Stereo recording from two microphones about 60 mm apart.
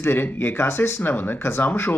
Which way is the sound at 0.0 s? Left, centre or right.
Left.